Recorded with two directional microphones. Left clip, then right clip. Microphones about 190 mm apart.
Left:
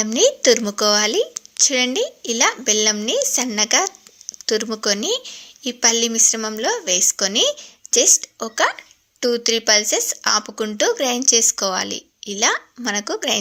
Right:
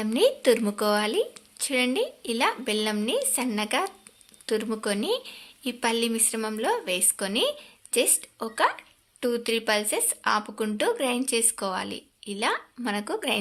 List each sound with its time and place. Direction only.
0.0 s a woman's voice: 20° left (ahead or behind)